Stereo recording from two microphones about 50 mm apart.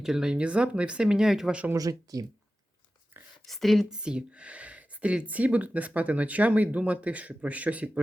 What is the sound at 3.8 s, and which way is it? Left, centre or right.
Speech, centre.